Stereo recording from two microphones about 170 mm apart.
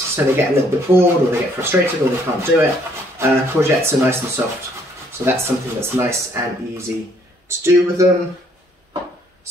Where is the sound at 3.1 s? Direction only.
15° right (ahead or behind).